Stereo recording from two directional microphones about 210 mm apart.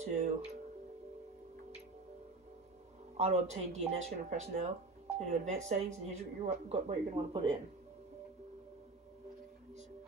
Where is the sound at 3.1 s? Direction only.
30° right (ahead or behind).